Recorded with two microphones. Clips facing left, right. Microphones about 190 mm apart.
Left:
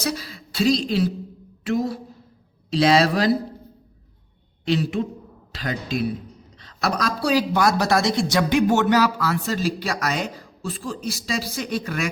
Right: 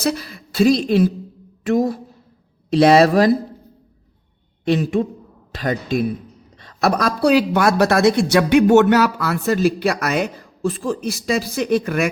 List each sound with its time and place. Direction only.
0.0 s a woman's voice: 55° right (ahead or behind)
4.6 s speech: 50° right (ahead or behind)